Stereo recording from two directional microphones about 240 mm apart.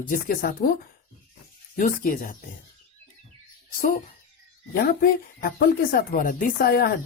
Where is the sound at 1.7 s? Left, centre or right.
Left.